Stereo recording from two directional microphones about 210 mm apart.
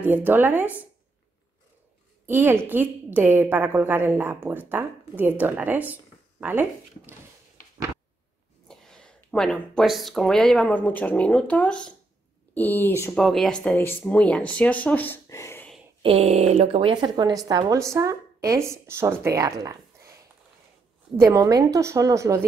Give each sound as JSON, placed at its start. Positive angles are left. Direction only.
{"t": 0.0, "sound": "speech", "side_deg": -10}
{"t": 2.2, "sound": "speech", "side_deg": -10}
{"t": 8.6, "sound": "speech", "side_deg": 5}
{"t": 13.2, "sound": "speech", "side_deg": 0}
{"t": 16.0, "sound": "speech", "side_deg": -30}
{"t": 21.2, "sound": "speech", "side_deg": -15}